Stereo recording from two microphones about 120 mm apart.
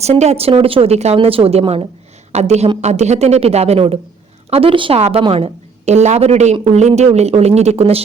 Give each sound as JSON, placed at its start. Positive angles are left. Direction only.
{"t": 0.0, "sound": "a man's voice", "side_deg": -65}